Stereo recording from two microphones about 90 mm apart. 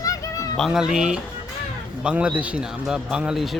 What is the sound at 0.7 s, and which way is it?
Speech, 10° right (ahead or behind).